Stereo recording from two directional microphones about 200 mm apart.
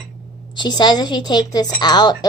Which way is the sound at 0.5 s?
20° left (ahead or behind).